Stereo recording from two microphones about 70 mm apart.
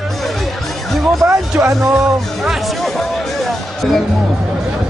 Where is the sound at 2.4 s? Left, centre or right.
Centre.